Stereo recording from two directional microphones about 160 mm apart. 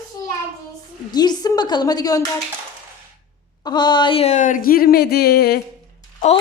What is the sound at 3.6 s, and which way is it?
Speech, 25° left (ahead or behind).